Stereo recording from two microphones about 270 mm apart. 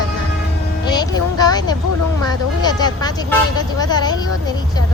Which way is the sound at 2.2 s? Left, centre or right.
Centre.